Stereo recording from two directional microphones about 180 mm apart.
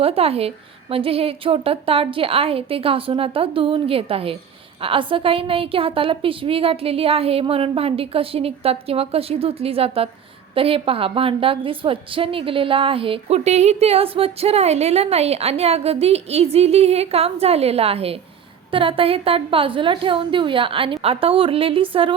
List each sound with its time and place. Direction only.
0.0 s a woman's voice: 35° right (ahead or behind)